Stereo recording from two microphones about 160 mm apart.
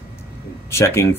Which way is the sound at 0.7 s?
15° left (ahead or behind).